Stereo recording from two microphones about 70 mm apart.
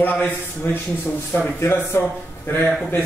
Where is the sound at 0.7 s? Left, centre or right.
Left.